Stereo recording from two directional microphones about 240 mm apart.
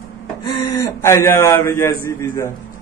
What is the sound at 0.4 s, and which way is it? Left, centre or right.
A man's voice, centre.